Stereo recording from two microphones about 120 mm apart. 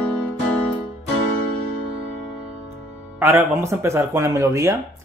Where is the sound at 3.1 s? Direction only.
25° right (ahead or behind).